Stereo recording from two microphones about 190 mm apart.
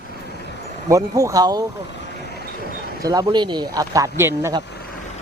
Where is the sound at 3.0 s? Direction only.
20° right (ahead or behind).